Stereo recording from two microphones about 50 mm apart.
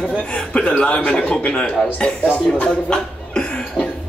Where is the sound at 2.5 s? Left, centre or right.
Left.